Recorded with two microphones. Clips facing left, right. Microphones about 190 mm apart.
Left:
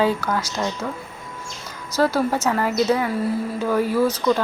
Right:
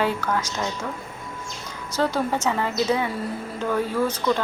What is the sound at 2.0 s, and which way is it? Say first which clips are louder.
A woman's voice: left 4 dB; 10° left (ahead or behind).